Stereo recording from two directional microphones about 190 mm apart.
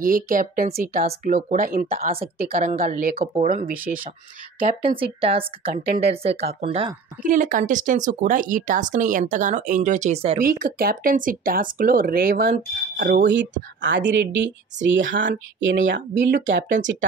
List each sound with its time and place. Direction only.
0.0 s speech: 45° right (ahead or behind)
4.9 s a woman's voice: 30° right (ahead or behind)
7.2 s speech: 45° right (ahead or behind)
10.4 s speech: 50° right (ahead or behind); by 15.8 s 80° right
15.9 s speech: 65° right (ahead or behind)